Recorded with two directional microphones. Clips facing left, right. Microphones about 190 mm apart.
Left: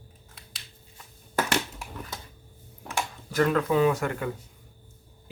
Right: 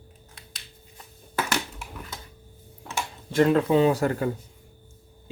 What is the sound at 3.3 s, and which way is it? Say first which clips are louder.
Speech: right 4 dB; 25° right (ahead or behind).